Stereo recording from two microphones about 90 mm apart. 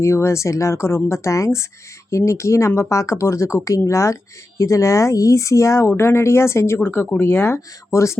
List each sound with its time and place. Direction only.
0.0 s speech: 30° left (ahead or behind)